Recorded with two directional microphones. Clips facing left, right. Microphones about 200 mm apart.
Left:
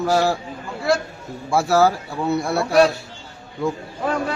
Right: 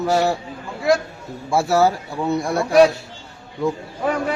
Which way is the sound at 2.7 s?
10° right (ahead or behind).